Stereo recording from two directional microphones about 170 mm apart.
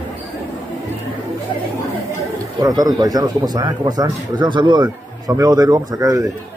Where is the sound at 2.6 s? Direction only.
20° right (ahead or behind).